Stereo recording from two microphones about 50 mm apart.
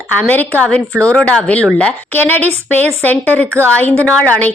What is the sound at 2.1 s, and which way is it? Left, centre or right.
A woman's voice, left.